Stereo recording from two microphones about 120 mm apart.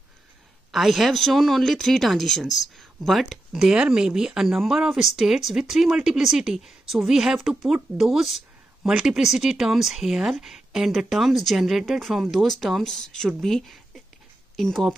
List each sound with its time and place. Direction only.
0.7 s speech: centre (ahead or behind)